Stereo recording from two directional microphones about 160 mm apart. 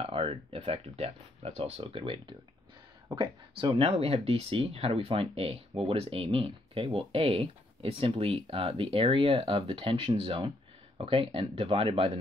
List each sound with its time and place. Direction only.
0.0 s speech: 35° right (ahead or behind)